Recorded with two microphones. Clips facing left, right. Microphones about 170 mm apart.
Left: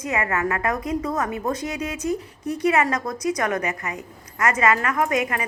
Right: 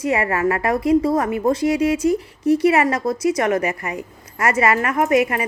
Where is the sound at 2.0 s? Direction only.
10° right (ahead or behind).